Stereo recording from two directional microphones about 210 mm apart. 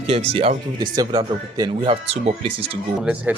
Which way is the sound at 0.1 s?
25° right (ahead or behind).